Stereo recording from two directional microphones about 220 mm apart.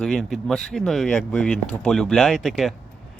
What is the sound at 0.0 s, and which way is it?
Speech, 5° left (ahead or behind).